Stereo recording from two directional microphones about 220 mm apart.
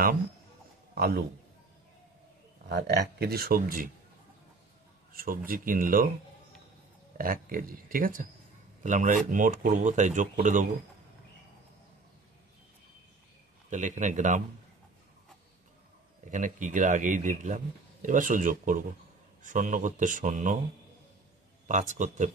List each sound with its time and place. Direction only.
0.9 s speech: 45° right (ahead or behind)
2.7 s speech: 50° right (ahead or behind)
5.1 s speech: 40° right (ahead or behind)
7.2 s speech: 40° right (ahead or behind)
13.7 s speech: 35° right (ahead or behind)
16.3 s speech: 35° right (ahead or behind)
21.6 s speech: 35° right (ahead or behind)